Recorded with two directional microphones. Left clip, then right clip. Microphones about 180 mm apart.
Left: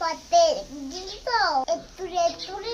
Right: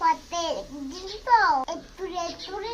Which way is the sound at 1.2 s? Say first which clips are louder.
Right 3 dB; 15° left (ahead or behind).